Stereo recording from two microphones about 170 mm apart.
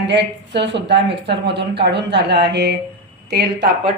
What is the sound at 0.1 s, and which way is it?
Speech, 90° right.